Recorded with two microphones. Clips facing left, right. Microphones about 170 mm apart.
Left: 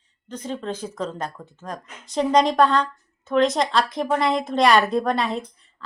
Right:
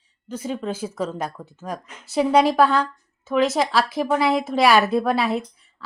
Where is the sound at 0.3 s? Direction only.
10° right (ahead or behind).